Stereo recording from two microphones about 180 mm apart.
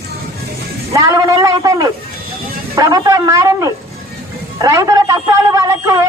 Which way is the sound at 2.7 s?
20° right (ahead or behind).